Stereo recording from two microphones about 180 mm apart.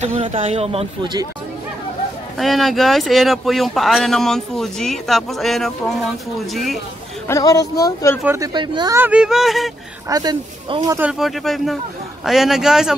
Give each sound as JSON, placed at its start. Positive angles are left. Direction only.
{"t": 0.0, "sound": "speech", "side_deg": -35}
{"t": 2.3, "sound": "speech", "side_deg": 0}
{"t": 7.2, "sound": "speech", "side_deg": 20}
{"t": 8.3, "sound": "speech", "side_deg": -20}
{"t": 8.9, "sound": "speech", "side_deg": -10}
{"t": 10.0, "sound": "speech", "side_deg": -20}
{"t": 11.0, "sound": "speech", "side_deg": -5}